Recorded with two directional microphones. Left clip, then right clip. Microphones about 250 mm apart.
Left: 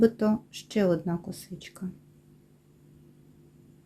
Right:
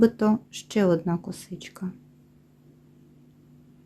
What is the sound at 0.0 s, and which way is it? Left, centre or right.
Speech, centre.